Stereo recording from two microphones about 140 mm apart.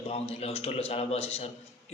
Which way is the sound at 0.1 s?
45° left (ahead or behind).